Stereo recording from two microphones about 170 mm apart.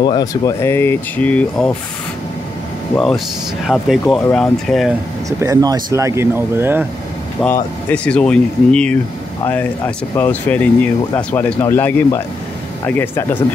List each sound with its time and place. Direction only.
0.0 s speech: 25° left (ahead or behind)
3.6 s speech: 5° right (ahead or behind)
5.4 s speech: 20° right (ahead or behind)
7.3 s speech: 10° left (ahead or behind)